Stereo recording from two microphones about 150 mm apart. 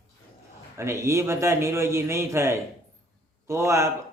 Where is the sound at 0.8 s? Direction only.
20° right (ahead or behind).